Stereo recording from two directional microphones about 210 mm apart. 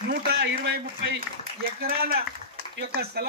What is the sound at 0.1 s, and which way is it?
Speech, 50° right (ahead or behind).